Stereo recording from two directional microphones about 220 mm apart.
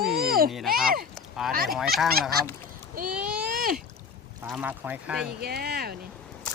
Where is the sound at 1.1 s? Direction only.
Centre (ahead or behind).